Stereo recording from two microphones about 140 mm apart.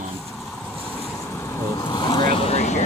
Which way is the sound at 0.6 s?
15° right (ahead or behind).